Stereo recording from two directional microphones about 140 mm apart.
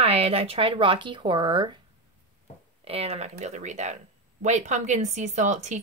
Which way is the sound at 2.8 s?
45° right (ahead or behind).